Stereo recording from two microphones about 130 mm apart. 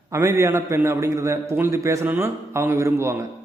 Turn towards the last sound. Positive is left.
turn(degrees=-20)  # may be behind; listen again after turning